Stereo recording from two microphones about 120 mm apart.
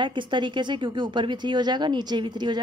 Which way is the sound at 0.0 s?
40° right (ahead or behind).